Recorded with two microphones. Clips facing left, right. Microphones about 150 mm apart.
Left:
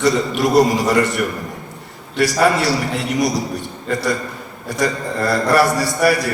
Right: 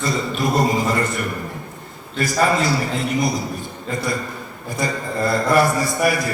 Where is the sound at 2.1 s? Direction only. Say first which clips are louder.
Left 3 dB; 80° left.